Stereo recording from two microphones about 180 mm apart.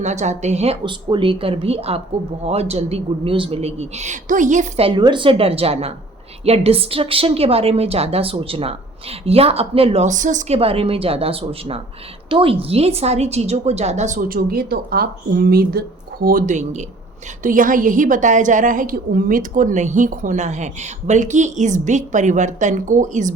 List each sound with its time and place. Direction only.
0.0 s a woman's voice: 40° right (ahead or behind)
4.9 s a woman's voice: 25° right (ahead or behind); by 15.8 s 55° right (ahead or behind)
16.2 s a woman's voice: 45° right (ahead or behind)